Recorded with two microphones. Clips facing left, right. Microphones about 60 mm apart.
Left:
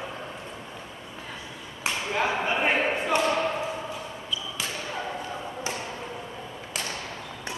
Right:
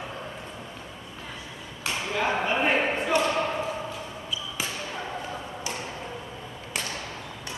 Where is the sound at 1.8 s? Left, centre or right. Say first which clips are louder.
Left 1 dB; left.